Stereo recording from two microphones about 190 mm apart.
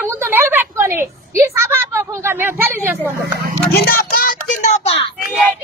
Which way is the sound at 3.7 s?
55° left (ahead or behind).